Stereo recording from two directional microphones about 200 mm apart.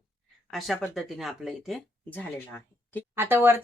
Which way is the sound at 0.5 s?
Centre (ahead or behind).